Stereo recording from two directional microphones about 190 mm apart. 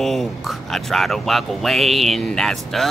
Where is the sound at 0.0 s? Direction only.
Centre (ahead or behind).